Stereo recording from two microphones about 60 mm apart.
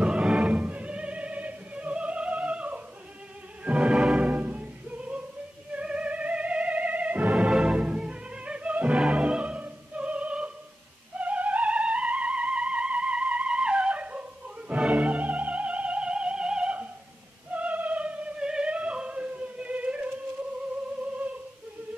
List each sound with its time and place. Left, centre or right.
0.0 s music: centre